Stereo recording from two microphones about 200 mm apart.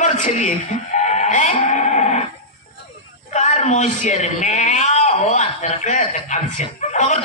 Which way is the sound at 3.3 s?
35° left (ahead or behind).